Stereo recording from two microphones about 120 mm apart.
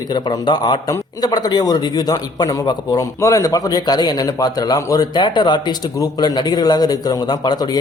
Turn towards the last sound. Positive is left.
turn(degrees=35)  # may be behind; listen again after turning